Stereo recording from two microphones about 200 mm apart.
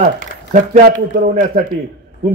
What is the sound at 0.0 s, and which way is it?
A man's voice, 40° right (ahead or behind).